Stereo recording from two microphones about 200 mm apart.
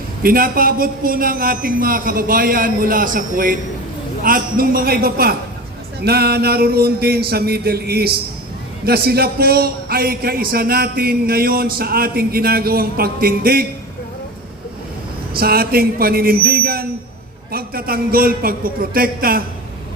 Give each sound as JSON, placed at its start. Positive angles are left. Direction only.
{"t": 0.2, "sound": "a man's voice", "side_deg": -45}
{"t": 15.3, "sound": "a man's voice", "side_deg": -50}